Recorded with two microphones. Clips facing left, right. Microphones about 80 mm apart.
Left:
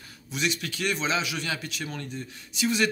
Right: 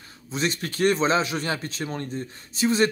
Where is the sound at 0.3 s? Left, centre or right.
Right.